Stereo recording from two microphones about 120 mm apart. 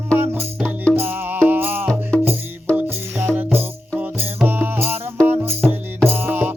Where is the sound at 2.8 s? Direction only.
15° right (ahead or behind).